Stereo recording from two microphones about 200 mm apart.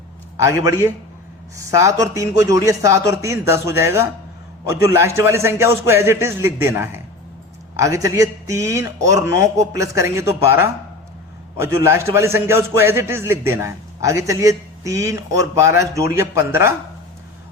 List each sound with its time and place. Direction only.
0.3 s a man's voice: 15° right (ahead or behind)